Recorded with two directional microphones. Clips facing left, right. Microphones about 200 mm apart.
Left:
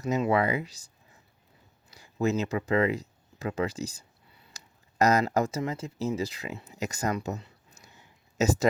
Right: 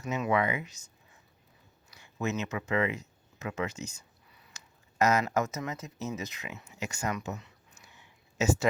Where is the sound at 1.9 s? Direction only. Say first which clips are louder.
Left 6 dB; 35° left (ahead or behind).